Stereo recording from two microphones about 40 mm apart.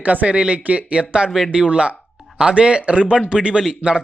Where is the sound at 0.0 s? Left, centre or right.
Right.